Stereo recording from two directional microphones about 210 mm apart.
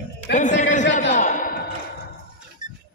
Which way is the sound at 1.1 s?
35° left (ahead or behind).